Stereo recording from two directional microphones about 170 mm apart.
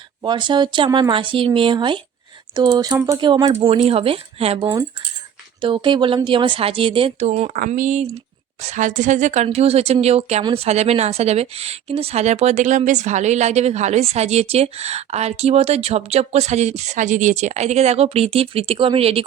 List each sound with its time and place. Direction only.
0.2 s speech: 25° right (ahead or behind)
3.5 s a woman's voice: 35° right (ahead or behind)
7.5 s a woman's voice: 50° right (ahead or behind); by 19.2 s 35° right (ahead or behind)